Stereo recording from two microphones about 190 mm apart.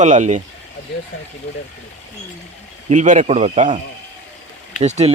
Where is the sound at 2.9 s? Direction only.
40° right (ahead or behind).